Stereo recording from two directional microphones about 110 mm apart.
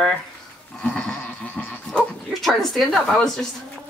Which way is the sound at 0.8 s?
10° left (ahead or behind).